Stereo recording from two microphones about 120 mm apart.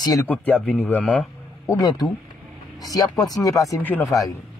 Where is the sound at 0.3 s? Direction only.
15° left (ahead or behind).